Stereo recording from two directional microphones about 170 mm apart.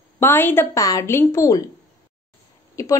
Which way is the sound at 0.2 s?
15° left (ahead or behind).